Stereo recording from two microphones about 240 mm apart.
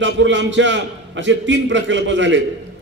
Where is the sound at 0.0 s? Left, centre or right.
Right.